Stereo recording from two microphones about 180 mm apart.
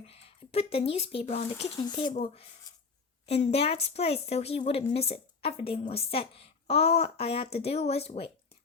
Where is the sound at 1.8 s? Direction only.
25° left (ahead or behind).